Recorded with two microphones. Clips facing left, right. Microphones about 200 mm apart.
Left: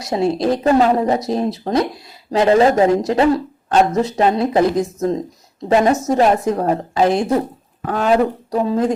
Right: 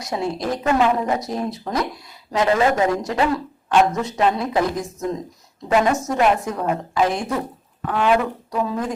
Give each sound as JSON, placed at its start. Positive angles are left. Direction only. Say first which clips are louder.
{"t": 0.1, "sound": "speech", "louder": "left 7 dB", "side_deg": 25}